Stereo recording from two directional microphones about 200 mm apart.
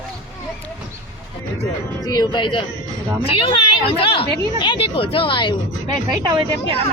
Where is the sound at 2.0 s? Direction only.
20° left (ahead or behind).